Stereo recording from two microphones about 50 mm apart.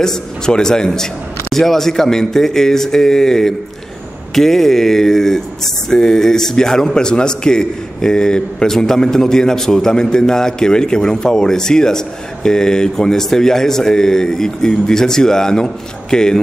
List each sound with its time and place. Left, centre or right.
0.0 s speech: centre